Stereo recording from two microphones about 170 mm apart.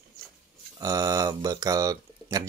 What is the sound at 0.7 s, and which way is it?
Speech, 20° right (ahead or behind).